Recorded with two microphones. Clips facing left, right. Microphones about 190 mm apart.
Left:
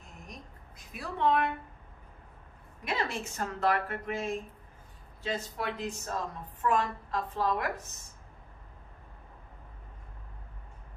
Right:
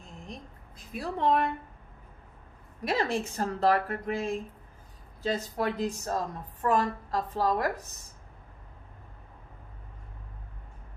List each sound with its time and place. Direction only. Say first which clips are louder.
0.9 s a woman's voice: right 2 dB; 35° right (ahead or behind)
2.8 s a woman's voice: right 5 dB; 35° right (ahead or behind)